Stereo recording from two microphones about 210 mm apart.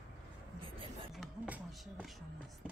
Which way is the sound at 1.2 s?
Centre (ahead or behind).